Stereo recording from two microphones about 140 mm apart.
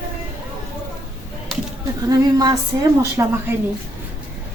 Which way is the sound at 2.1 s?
25° right (ahead or behind).